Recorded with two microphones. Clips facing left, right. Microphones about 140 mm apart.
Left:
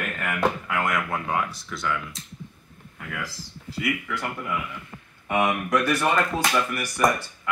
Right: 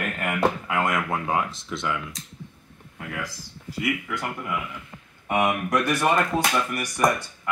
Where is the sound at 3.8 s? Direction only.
20° right (ahead or behind).